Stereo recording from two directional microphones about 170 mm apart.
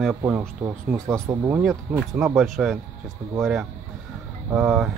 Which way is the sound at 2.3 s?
Centre (ahead or behind).